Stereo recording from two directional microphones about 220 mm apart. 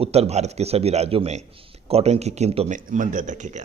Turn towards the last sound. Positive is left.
turn(degrees=-35)  # may be behind; listen again after turning